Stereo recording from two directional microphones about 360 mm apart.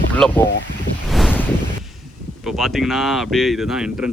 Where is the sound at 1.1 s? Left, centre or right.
Centre.